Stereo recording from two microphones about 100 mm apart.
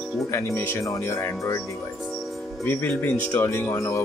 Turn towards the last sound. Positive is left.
turn(degrees=25)  # may be behind; listen again after turning